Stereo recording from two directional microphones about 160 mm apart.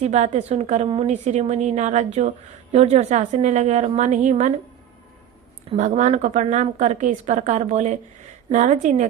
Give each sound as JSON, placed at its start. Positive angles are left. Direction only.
{"t": 0.0, "sound": "a woman's voice", "side_deg": -45}
{"t": 5.7, "sound": "a woman's voice", "side_deg": -50}